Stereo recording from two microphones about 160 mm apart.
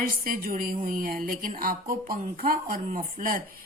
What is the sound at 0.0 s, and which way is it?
A woman's voice, 60° right (ahead or behind).